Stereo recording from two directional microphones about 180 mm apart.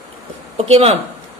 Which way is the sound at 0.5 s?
35° right (ahead or behind).